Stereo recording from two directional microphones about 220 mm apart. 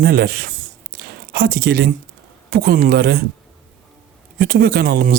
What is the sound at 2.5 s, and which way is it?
Speech, 45° right (ahead or behind).